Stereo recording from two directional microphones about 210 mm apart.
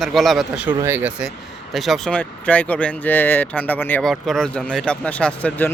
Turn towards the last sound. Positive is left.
turn(degrees=5)  # may be behind; listen again after turning